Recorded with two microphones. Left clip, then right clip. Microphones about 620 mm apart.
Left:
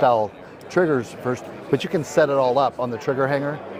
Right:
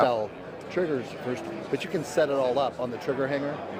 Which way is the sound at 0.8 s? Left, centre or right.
Left.